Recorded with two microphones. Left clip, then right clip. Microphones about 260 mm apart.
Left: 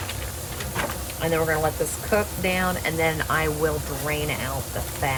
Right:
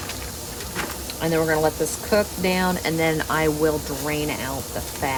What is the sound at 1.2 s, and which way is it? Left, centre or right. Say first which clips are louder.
Speech: right 2 dB; right.